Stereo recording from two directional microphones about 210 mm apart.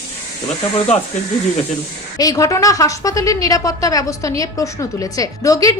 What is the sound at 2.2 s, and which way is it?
A woman's voice, 15° left (ahead or behind).